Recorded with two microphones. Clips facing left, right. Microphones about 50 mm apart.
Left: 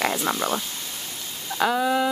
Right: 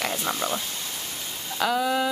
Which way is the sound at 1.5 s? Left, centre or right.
Left.